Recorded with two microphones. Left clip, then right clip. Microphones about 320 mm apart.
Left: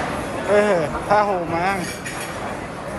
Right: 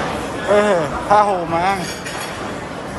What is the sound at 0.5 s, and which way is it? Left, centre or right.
Speech, centre.